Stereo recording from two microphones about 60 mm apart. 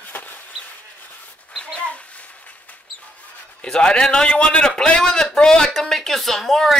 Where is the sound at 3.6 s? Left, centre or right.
Centre.